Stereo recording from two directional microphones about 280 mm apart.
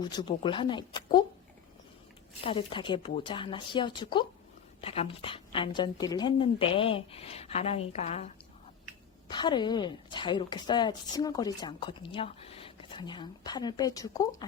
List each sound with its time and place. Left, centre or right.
0.0 s a woman's voice: centre
2.4 s a woman's voice: centre
9.3 s a woman's voice: centre